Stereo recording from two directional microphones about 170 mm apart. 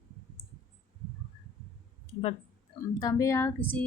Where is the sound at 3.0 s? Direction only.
20° left (ahead or behind).